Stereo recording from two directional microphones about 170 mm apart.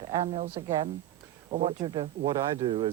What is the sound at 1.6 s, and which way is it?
Speech, 30° right (ahead or behind).